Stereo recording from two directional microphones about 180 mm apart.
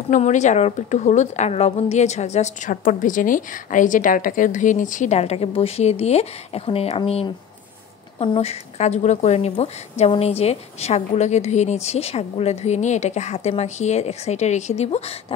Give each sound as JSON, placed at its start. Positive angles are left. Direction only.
{"t": 0.1, "sound": "a woman's voice", "side_deg": 40}